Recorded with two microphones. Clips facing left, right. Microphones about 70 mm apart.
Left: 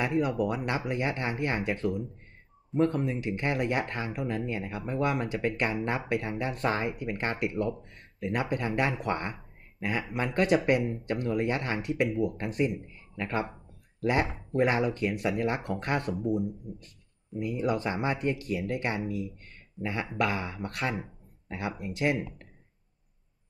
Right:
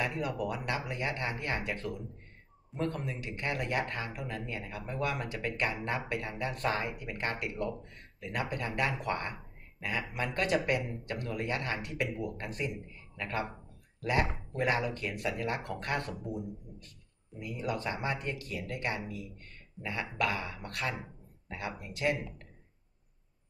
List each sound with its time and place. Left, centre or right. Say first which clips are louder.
0.0 s speech: left 6 dB; left
3.0 s speech: left 8 dB; left
14.7 s speech: left 4 dB; left
17.4 s speech: left 7 dB; left